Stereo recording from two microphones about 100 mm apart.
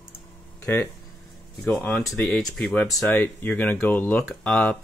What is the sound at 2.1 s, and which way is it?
Speech, 5° left (ahead or behind).